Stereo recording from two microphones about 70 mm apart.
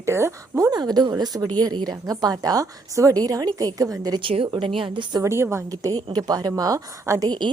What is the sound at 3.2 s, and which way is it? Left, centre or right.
A woman's voice, right.